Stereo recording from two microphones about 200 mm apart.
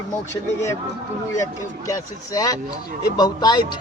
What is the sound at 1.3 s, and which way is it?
A man's voice, 15° left (ahead or behind).